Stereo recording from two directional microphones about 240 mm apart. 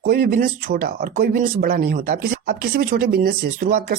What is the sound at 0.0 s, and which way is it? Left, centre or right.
Speech, right.